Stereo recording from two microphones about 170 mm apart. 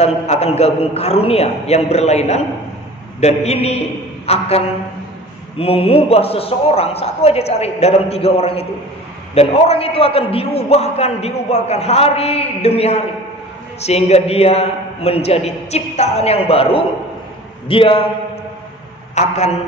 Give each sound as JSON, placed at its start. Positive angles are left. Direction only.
{"t": 0.0, "sound": "a man's voice", "side_deg": 40}
{"t": 19.1, "sound": "a man's voice", "side_deg": 40}